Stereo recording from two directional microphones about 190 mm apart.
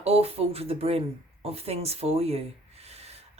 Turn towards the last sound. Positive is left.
turn(degrees=-35)  # may be behind; listen again after turning